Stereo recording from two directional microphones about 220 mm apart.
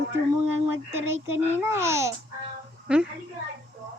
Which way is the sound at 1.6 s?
10° right (ahead or behind).